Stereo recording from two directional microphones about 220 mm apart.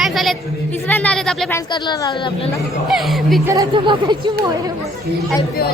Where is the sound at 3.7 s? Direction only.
20° right (ahead or behind).